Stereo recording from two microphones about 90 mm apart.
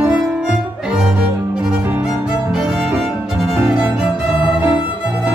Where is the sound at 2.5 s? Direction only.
5° right (ahead or behind).